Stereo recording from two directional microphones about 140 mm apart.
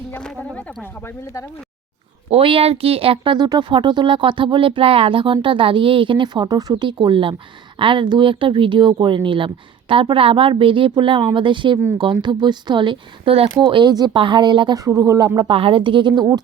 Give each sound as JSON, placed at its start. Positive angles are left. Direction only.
{"t": 0.1, "sound": "speech", "side_deg": 5}
{"t": 2.3, "sound": "speech", "side_deg": -40}